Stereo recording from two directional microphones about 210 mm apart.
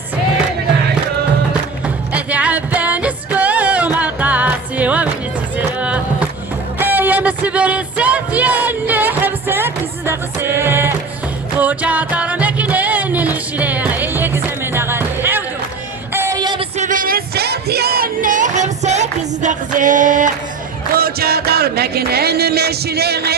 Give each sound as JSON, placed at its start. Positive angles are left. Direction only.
{"t": 2.1, "sound": "music", "side_deg": -5}
{"t": 5.8, "sound": "a sound", "side_deg": -5}
{"t": 6.7, "sound": "music", "side_deg": -10}
{"t": 16.1, "sound": "female singing", "side_deg": -15}
{"t": 16.7, "sound": "music", "side_deg": -35}